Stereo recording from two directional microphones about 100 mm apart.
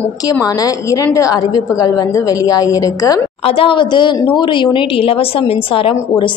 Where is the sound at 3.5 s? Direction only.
65° left (ahead or behind).